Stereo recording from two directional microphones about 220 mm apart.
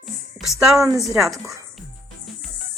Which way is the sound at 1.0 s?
Centre (ahead or behind).